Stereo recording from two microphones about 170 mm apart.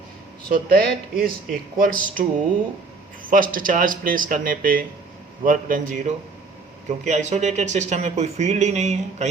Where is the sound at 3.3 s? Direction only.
55° right (ahead or behind).